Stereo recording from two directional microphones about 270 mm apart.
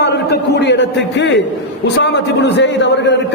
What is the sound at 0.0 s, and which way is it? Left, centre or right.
A man's voice, left.